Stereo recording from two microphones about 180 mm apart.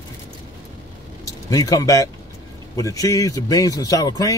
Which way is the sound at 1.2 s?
20° left (ahead or behind).